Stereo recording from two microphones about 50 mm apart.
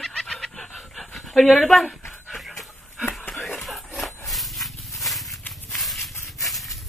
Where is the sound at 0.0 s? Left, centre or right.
Centre.